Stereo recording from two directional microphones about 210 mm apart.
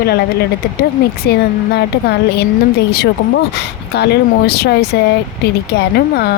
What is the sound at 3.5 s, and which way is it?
Speech, 50° left (ahead or behind).